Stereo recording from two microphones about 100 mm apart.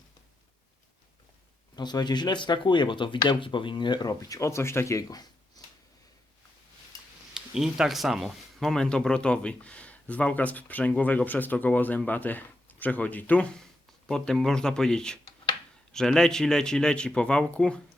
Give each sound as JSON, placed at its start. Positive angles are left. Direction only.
{"t": 1.7, "sound": "speech", "side_deg": 45}
{"t": 4.1, "sound": "speech", "side_deg": 35}
{"t": 7.3, "sound": "speech", "side_deg": -5}